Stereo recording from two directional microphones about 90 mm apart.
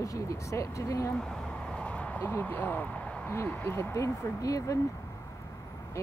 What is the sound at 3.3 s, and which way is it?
Speech, 20° left (ahead or behind).